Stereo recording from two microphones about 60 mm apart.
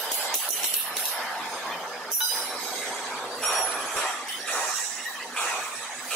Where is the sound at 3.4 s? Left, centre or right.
Centre.